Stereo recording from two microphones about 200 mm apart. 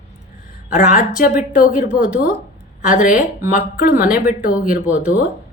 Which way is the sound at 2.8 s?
40° left (ahead or behind).